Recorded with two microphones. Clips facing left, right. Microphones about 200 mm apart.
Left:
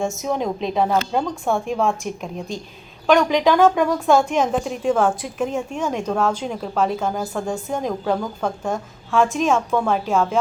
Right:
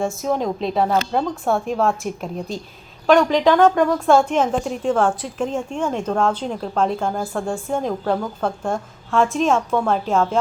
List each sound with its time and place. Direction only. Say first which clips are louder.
0.2 s a woman's voice: right 1 dB; centre (ahead or behind)
9.0 s a woman's voice: even; 5° left (ahead or behind)